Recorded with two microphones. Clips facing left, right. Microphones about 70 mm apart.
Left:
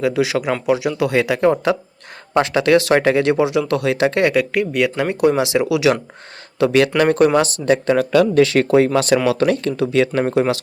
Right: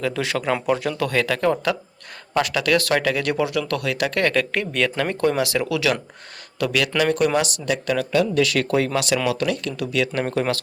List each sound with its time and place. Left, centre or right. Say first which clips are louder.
0.0 s speech: left 6 dB; centre
6.6 s speech: left 7 dB; left
10.2 s speech: left 6 dB; left